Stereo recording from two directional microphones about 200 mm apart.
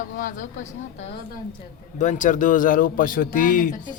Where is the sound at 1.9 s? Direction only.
40° left (ahead or behind).